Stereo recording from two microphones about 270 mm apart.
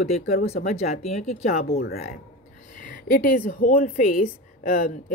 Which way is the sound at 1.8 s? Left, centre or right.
Left.